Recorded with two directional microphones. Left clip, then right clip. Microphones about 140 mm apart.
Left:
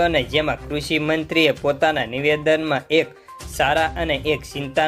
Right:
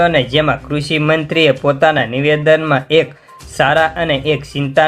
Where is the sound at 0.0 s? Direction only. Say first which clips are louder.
Right 6 dB; 25° left (ahead or behind).